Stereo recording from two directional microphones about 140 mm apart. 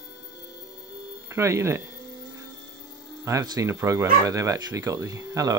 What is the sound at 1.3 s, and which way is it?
Speech, 20° right (ahead or behind).